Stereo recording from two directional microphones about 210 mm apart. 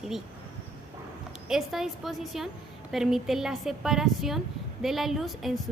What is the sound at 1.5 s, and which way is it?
A woman's voice, centre (ahead or behind).